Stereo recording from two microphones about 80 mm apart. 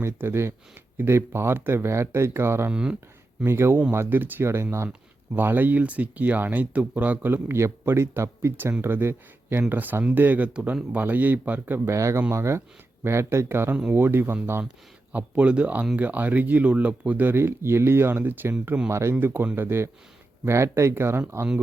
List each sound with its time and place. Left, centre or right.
0.0 s speech: right
4.9 s speech: right
11.9 s speech: right
15.1 s speech: centre
18.9 s speech: right
19.2 s speech: right